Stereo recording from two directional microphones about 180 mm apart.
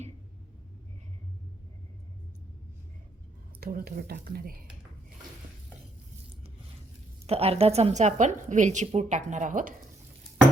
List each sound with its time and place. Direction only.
3.6 s speech: 55° right (ahead or behind)
7.3 s a woman's voice: 35° right (ahead or behind)